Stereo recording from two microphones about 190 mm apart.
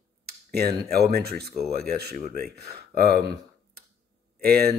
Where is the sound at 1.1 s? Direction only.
55° right (ahead or behind).